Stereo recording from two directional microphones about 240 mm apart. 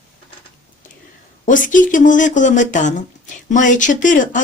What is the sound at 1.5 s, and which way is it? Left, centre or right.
Speech, left.